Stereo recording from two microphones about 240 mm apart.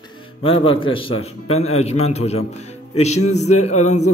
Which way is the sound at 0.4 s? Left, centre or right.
Left.